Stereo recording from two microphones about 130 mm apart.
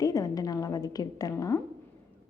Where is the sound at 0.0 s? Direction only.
30° left (ahead or behind).